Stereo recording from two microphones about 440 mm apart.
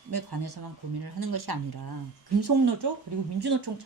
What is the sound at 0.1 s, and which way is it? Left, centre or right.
Speech, right.